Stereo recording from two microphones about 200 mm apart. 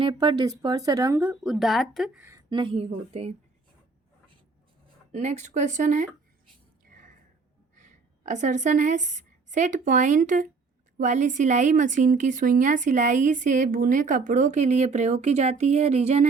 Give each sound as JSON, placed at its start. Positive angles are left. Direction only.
{"t": 0.0, "sound": "speech", "side_deg": -25}
{"t": 2.3, "sound": "a woman's voice", "side_deg": -25}
{"t": 5.1, "sound": "speech", "side_deg": -35}
{"t": 7.8, "sound": "a woman's voice", "side_deg": -40}